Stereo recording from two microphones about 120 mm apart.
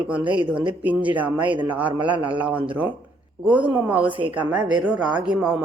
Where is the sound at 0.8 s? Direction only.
15° right (ahead or behind).